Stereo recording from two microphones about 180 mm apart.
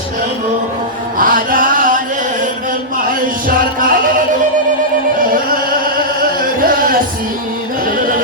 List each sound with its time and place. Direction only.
1.2 s a sound: 50° right (ahead or behind)
3.8 s music: 50° right (ahead or behind)
6.6 s music: 50° right (ahead or behind)